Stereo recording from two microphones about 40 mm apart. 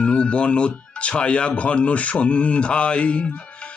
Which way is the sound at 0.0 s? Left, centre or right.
Left.